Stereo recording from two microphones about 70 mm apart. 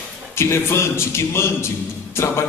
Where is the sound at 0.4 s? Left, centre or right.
Left.